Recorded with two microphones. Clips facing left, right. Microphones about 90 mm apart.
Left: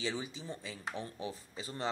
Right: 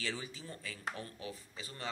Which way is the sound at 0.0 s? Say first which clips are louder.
Left 3 dB; 20° left (ahead or behind).